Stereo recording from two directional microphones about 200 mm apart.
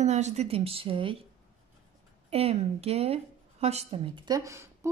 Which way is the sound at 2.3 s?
30° right (ahead or behind).